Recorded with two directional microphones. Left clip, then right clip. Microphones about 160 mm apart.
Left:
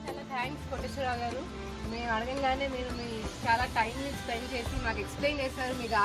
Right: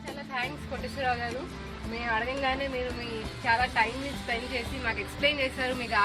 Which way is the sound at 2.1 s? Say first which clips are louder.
Right 2 dB; 15° right (ahead or behind).